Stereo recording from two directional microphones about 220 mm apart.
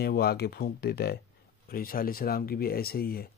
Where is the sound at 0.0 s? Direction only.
45° left (ahead or behind).